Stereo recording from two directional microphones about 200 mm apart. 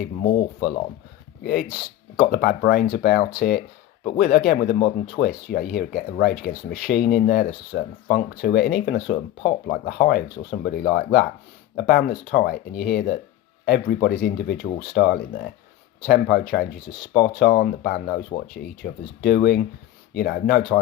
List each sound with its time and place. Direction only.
1.5 s speech: 45° left (ahead or behind)